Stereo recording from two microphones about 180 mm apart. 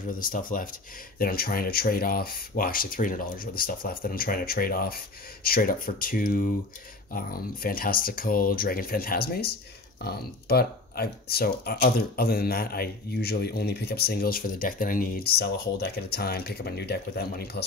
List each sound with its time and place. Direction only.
0.1 s speech: 50° left (ahead or behind)